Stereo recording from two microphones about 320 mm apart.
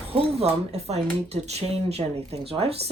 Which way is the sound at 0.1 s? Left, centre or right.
Centre.